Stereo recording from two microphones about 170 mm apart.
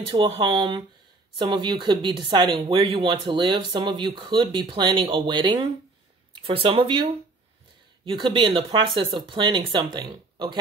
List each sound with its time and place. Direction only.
0.0 s speech: 30° right (ahead or behind)